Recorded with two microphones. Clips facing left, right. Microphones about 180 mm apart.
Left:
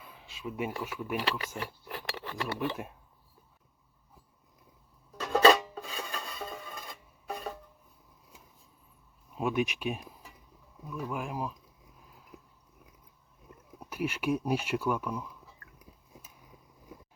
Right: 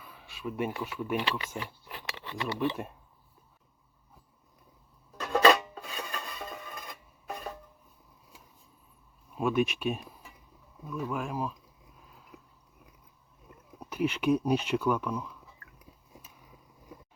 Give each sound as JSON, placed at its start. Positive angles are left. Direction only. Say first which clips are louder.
{"t": 0.1, "sound": "a sound", "louder": "right 2 dB", "side_deg": 20}
{"t": 1.2, "sound": "speech", "louder": "even", "side_deg": 45}
{"t": 5.2, "sound": "filing", "louder": "left 1 dB", "side_deg": 30}
{"t": 9.3, "sound": "speech", "louder": "right 3 dB", "side_deg": 15}
{"t": 13.9, "sound": "speech", "louder": "right 4 dB", "side_deg": 10}